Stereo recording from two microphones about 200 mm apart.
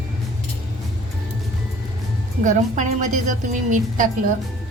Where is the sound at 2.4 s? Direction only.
40° right (ahead or behind).